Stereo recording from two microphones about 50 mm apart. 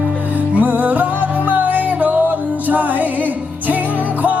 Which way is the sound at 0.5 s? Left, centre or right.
Right.